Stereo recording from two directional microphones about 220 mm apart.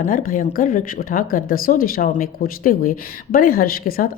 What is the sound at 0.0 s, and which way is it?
Speech, 40° left (ahead or behind).